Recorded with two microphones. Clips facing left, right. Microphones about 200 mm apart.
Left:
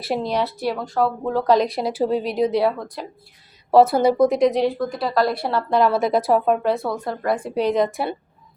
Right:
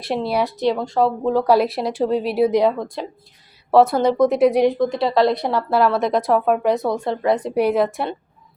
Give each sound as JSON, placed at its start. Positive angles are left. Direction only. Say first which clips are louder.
{"t": 0.3, "sound": "a woman's voice", "louder": "right 4 dB", "side_deg": -10}
{"t": 0.6, "sound": "a woman's voice", "louder": "right 3 dB", "side_deg": -25}
{"t": 3.7, "sound": "a woman's voice", "louder": "even", "side_deg": 0}
{"t": 5.8, "sound": "a woman's voice", "louder": "left 1 dB", "side_deg": 0}
{"t": 6.7, "sound": "a woman's voice", "louder": "right 3 dB", "side_deg": -20}